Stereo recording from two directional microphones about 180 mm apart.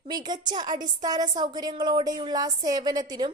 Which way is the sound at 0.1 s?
25° right (ahead or behind).